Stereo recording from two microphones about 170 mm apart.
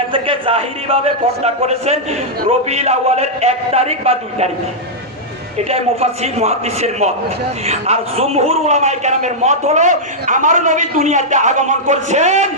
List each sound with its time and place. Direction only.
0.1 s a man's voice: 30° right (ahead or behind)
5.6 s a man's voice: 35° right (ahead or behind)